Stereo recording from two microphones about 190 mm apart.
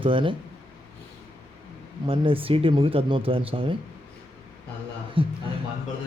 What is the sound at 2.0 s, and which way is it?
Speech, 30° right (ahead or behind).